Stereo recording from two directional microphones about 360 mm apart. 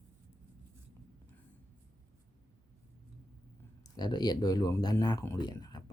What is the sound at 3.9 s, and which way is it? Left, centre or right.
Speech, centre.